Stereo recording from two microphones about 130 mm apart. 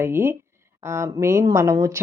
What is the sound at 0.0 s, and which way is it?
A woman's voice, 15° right (ahead or behind).